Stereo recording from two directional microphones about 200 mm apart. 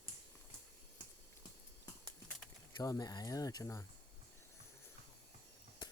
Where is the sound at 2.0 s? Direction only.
5° left (ahead or behind).